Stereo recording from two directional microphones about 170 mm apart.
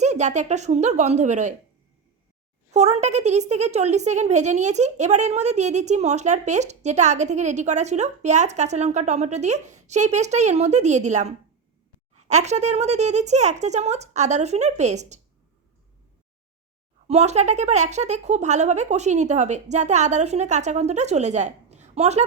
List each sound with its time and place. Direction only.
0.0 s a woman's voice: 45° right (ahead or behind)
2.7 s a woman's voice: 40° right (ahead or behind)
17.1 s a woman's voice: 40° right (ahead or behind)